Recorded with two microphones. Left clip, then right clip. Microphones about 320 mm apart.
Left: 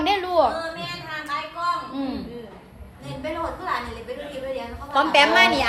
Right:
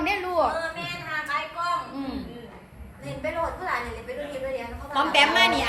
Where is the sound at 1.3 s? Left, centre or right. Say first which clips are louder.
Left 1 dB; centre.